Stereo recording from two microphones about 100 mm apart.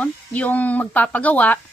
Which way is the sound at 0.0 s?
15° left (ahead or behind).